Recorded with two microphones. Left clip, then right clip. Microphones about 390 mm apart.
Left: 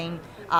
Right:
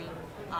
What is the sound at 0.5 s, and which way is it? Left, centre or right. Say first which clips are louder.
Speech: left 13 dB; left.